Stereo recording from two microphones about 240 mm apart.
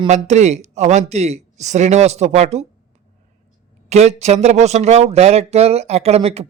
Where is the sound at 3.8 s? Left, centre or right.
Right.